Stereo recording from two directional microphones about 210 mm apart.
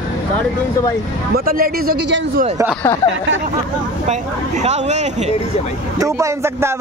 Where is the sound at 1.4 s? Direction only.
45° right (ahead or behind).